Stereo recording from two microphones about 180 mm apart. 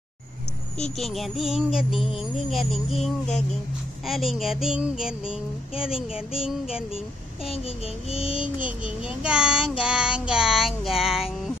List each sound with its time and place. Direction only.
0.9 s child singing: centre (ahead or behind)
8.1 s child singing: 30° left (ahead or behind)
8.6 s child singing: 5° right (ahead or behind)